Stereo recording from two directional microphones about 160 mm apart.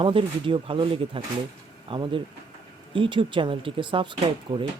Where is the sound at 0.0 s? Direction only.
35° right (ahead or behind).